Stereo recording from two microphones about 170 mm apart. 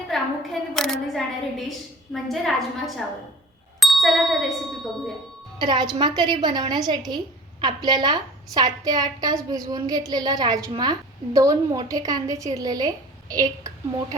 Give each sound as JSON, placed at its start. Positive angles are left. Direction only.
{"t": 0.1, "sound": "a sound", "side_deg": 0}
{"t": 0.8, "sound": "a woman's voice", "side_deg": 0}
{"t": 5.5, "sound": "a woman's voice", "side_deg": -25}